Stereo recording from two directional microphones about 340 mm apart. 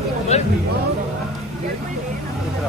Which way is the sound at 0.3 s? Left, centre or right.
Centre.